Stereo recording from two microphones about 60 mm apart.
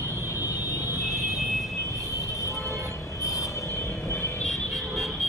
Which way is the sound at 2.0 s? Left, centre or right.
Left.